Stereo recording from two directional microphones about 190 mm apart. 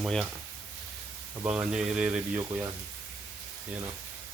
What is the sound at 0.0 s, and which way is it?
Speech, centre (ahead or behind).